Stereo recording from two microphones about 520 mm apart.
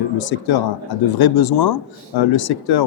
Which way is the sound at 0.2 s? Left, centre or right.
Left.